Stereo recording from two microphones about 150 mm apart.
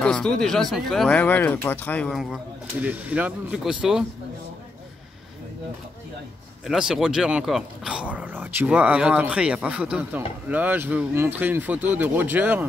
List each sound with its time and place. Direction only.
0.0 s speech: 5° left (ahead or behind)
2.1 s speech: centre (ahead or behind)
6.6 s speech: 5° right (ahead or behind)